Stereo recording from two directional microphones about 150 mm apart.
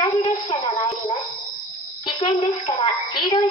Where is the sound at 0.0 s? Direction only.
45° left (ahead or behind).